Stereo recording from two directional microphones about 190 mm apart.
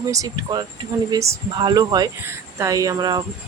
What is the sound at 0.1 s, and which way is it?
Speech, 20° right (ahead or behind).